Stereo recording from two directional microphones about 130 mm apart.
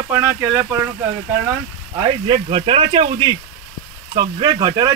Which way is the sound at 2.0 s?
40° right (ahead or behind).